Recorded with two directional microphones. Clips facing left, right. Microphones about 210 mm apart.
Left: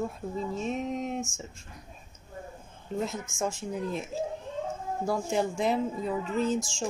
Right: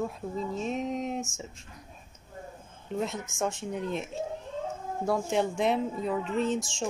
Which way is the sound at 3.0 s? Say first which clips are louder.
Even; centre (ahead or behind).